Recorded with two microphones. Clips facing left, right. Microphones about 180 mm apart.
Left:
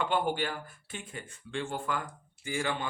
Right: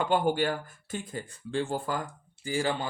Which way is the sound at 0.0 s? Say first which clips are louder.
Right 4 dB; 40° right (ahead or behind).